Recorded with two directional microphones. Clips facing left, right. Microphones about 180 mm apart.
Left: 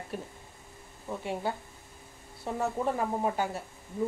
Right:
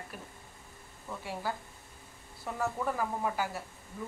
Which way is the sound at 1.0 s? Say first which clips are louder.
Left 4 dB; 25° left (ahead or behind).